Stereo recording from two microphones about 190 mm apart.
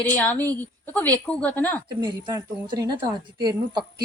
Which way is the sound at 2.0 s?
25° right (ahead or behind).